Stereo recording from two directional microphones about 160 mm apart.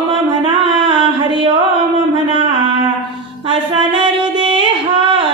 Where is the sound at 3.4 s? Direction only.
30° right (ahead or behind).